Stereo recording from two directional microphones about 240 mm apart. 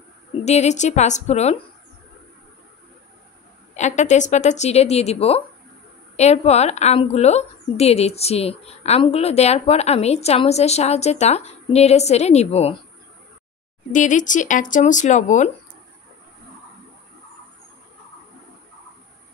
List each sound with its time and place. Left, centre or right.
0.5 s speech: left
3.7 s speech: left
13.9 s speech: left